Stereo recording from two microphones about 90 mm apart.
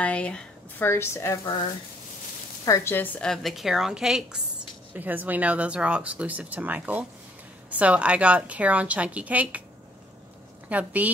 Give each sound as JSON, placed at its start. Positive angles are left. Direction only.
{"t": 0.0, "sound": "a woman's voice", "side_deg": 15}
{"t": 0.8, "sound": "a woman's voice", "side_deg": 30}
{"t": 2.6, "sound": "speech", "side_deg": 40}
{"t": 2.9, "sound": "a woman's voice", "side_deg": 20}
{"t": 3.2, "sound": "a woman's voice", "side_deg": 5}
{"t": 4.9, "sound": "speech", "side_deg": -20}
{"t": 10.7, "sound": "speech", "side_deg": -15}